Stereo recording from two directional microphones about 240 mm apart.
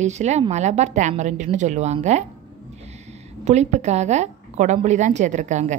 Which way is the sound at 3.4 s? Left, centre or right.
Right.